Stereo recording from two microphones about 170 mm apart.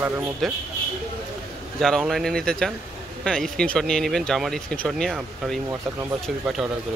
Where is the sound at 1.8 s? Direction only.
Centre (ahead or behind).